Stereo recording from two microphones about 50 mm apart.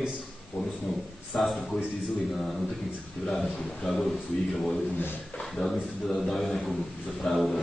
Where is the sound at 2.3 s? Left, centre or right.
Centre.